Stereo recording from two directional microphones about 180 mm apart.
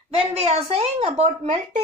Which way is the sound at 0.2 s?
35° right (ahead or behind).